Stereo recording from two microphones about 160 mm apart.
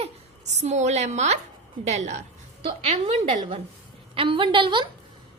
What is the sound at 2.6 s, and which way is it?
A woman's voice, 35° right (ahead or behind).